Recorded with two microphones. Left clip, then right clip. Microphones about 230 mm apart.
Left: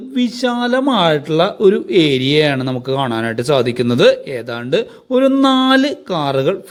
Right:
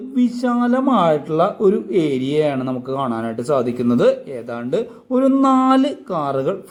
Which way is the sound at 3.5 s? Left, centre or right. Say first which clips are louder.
Left 3 dB; left.